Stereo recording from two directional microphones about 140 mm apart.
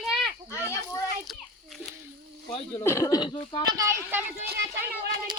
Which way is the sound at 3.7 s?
20° right (ahead or behind).